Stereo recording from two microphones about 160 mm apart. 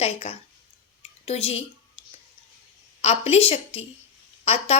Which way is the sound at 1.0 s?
35° left (ahead or behind).